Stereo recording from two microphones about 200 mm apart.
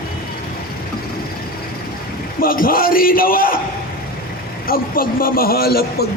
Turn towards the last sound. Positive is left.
turn(degrees=50)  # may be behind; listen again after turning